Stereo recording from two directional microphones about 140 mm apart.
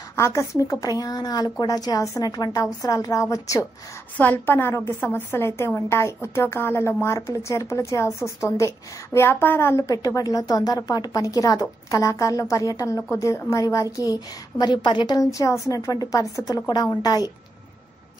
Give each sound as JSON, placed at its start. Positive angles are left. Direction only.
{"t": 0.1, "sound": "a woman's voice", "side_deg": 20}
{"t": 4.2, "sound": "a woman's voice", "side_deg": 10}